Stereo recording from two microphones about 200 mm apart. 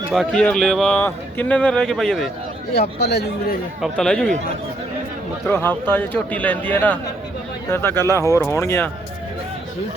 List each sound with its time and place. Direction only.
0.1 s speech: centre (ahead or behind)
3.0 s speech: 55° left (ahead or behind)
3.8 s speech: 5° left (ahead or behind)
5.5 s speech: 10° left (ahead or behind)